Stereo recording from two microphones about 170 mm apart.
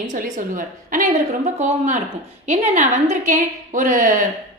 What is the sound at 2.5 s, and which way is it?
A woman's voice, 45° right (ahead or behind).